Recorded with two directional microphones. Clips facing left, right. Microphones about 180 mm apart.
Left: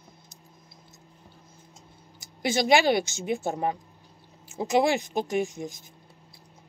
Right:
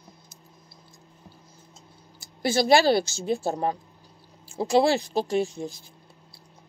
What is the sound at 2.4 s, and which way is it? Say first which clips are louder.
Speech: right 2 dB; 15° left (ahead or behind).